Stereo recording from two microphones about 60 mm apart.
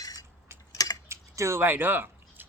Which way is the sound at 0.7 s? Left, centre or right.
Left.